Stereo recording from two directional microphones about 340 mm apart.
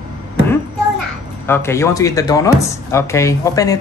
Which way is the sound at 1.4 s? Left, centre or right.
Centre.